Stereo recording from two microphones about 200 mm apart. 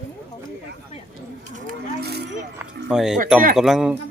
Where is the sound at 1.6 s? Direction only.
50° right (ahead or behind).